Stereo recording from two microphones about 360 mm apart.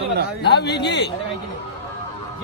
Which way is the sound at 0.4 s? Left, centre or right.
Left.